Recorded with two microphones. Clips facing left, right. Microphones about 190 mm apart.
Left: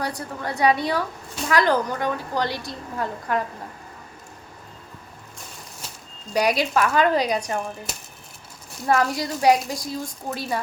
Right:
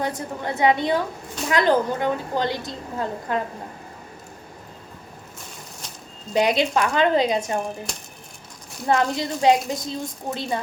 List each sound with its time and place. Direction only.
0.0 s a woman's voice: 20° right (ahead or behind)
6.3 s a woman's voice: 25° right (ahead or behind)
7.9 s speech: 5° left (ahead or behind)
8.9 s a woman's voice: 25° right (ahead or behind)